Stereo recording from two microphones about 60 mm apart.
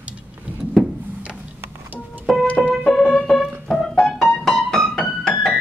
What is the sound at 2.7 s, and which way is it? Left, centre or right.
Keyboard, centre.